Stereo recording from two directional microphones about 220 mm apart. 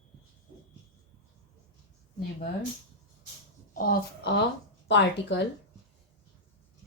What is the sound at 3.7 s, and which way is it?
Speech, 40° left (ahead or behind).